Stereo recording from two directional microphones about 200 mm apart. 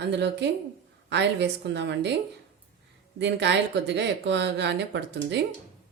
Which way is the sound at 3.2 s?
60° right (ahead or behind).